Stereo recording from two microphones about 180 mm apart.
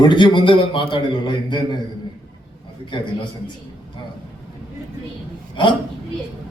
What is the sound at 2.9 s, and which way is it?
Speech, 25° left (ahead or behind).